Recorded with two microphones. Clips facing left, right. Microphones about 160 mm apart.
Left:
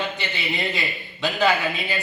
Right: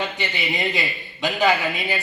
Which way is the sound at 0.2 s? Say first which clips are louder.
Right 2 dB; 15° right (ahead or behind).